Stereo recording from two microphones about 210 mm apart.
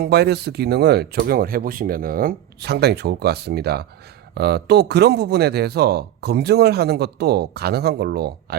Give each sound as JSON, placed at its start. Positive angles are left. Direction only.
{"t": 0.0, "sound": "a man's voice", "side_deg": -50}